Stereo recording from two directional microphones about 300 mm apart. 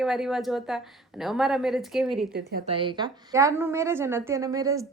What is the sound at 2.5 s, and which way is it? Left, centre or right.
Speech, right.